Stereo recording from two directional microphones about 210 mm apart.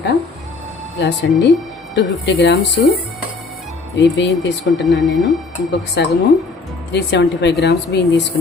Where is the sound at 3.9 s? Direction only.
60° left (ahead or behind).